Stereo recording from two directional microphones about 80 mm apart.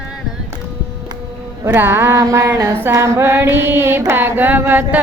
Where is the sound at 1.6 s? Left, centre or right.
Right.